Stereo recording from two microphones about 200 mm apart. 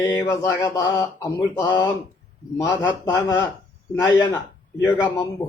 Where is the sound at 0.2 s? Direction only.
15° left (ahead or behind).